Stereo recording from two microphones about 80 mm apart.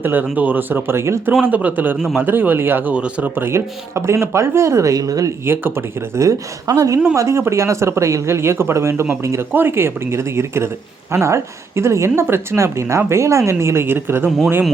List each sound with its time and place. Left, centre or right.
0.0 s speech: right
1.5 s speech: right
5.5 s a woman's voice: right
9.5 s a woman's voice: right
14.3 s speech: centre